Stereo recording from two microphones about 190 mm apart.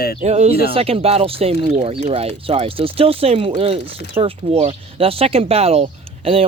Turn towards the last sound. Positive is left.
turn(degrees=-30)  # may be behind; listen again after turning